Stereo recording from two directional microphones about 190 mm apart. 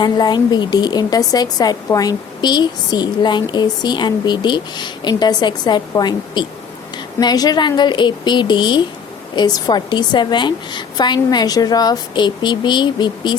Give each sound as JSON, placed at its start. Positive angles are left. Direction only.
{"t": 0.0, "sound": "a woman's voice", "side_deg": 20}